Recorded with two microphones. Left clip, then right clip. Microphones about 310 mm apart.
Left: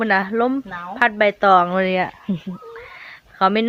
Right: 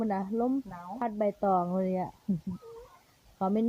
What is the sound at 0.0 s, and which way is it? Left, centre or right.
Speech, right.